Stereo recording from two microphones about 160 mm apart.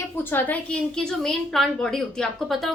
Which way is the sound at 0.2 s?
10° left (ahead or behind).